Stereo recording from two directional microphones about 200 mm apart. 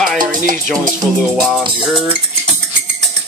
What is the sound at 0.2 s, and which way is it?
Music, 45° right (ahead or behind).